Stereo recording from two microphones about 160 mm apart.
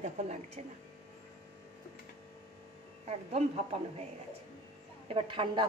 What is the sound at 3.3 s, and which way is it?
Speech, 40° right (ahead or behind).